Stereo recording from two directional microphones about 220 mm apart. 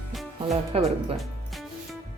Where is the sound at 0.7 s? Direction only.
25° right (ahead or behind).